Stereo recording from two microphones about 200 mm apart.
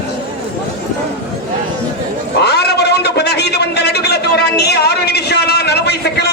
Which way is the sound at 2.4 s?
55° left (ahead or behind).